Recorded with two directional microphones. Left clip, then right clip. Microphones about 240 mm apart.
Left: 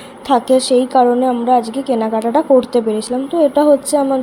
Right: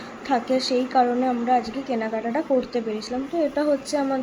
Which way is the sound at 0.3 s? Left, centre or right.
Left.